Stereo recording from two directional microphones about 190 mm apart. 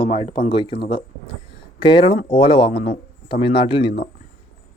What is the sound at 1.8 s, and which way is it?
Speech, 25° left (ahead or behind).